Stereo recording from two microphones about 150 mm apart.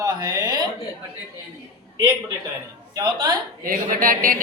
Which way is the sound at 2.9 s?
25° right (ahead or behind).